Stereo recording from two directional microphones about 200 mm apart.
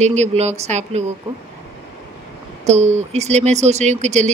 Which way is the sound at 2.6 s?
35° right (ahead or behind).